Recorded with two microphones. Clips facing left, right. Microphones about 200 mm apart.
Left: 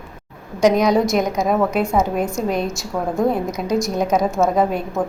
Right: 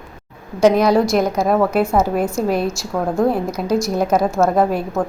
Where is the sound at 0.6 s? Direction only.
5° right (ahead or behind).